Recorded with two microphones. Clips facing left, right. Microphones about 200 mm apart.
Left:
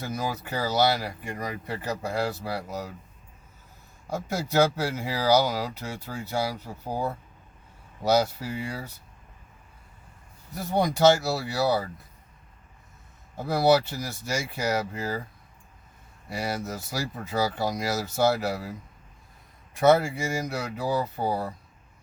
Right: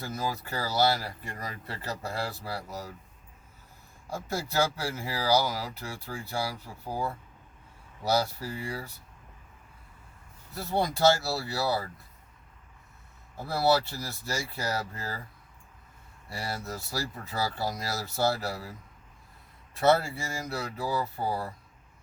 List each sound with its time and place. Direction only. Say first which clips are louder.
0.0 s speech: left 2 dB; 15° left (ahead or behind)
4.0 s speech: left 3 dB; 15° left (ahead or behind)
10.5 s speech: left 4 dB; 15° left (ahead or behind)
13.3 s speech: left 4 dB; 20° left (ahead or behind)
16.3 s speech: left 5 dB; 15° left (ahead or behind)
19.7 s speech: left 4 dB; 15° left (ahead or behind)